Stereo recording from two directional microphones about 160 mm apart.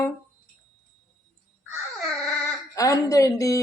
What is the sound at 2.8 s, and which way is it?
Speech, 20° left (ahead or behind).